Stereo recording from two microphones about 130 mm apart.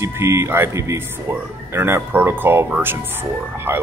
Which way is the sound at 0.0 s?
20° right (ahead or behind).